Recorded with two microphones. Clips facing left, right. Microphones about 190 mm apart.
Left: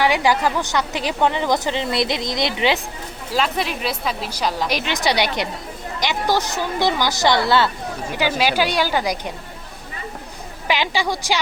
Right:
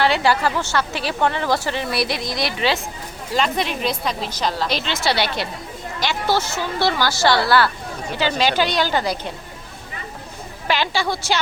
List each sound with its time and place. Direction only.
0.0 s a woman's voice: 15° left (ahead or behind)
3.3 s a woman's voice: 5° left (ahead or behind); by 7.7 s 20° left (ahead or behind)
8.1 s a woman's voice: 10° left (ahead or behind)
10.7 s a woman's voice: 15° left (ahead or behind)